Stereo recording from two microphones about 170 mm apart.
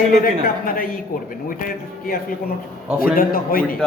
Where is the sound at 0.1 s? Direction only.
60° left (ahead or behind).